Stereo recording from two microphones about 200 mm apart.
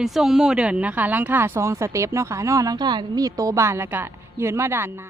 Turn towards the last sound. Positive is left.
turn(degrees=-10)  # may be behind; listen again after turning